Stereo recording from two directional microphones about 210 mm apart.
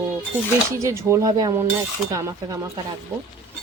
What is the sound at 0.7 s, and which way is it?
Speech, 15° right (ahead or behind).